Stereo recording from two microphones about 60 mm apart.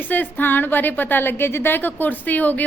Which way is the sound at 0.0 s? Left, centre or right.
Left.